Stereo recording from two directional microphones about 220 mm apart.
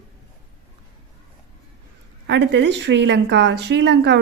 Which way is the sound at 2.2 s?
55° right (ahead or behind).